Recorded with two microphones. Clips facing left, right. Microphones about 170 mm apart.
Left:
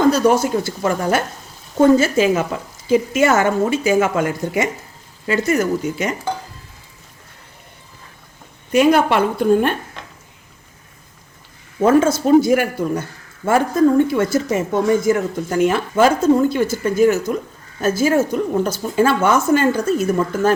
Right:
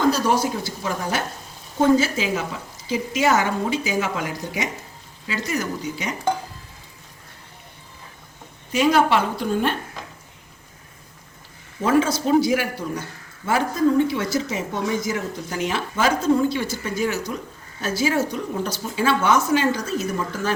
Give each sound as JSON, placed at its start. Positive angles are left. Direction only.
{"t": 0.4, "sound": "a man's voice", "side_deg": 50}
{"t": 8.7, "sound": "a woman's voice", "side_deg": 55}
{"t": 11.8, "sound": "a man's voice", "side_deg": 50}